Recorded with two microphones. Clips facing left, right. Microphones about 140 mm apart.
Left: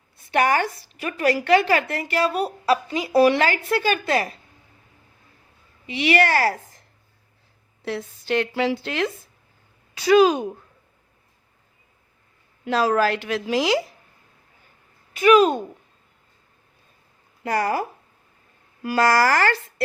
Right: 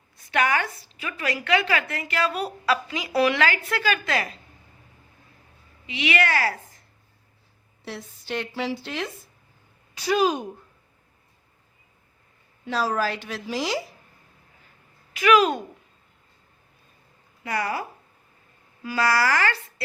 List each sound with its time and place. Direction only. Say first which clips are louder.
0.3 s a woman's voice: left 4 dB; 35° left (ahead or behind)
5.8 s a woman's voice: left 5 dB; 40° left (ahead or behind)
7.9 s a woman's voice: left 8 dB; 80° left
10.1 s a woman's voice: left 7 dB; 90° left
12.6 s a woman's voice: left 5 dB; 70° left (ahead or behind); by 13.7 s 90° left
15.2 s a woman's voice: left 4 dB; 35° left (ahead or behind)
17.4 s speech: left 5 dB; 45° left (ahead or behind)